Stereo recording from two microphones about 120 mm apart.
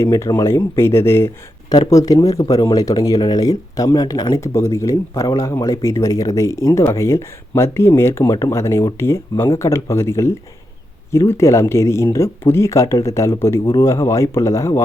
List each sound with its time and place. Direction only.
0.0 s speech: 20° left (ahead or behind)